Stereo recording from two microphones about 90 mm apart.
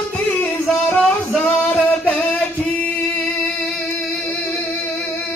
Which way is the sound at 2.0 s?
15° left (ahead or behind).